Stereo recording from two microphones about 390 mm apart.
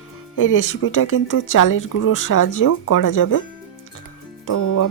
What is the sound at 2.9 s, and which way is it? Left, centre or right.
Speech, left.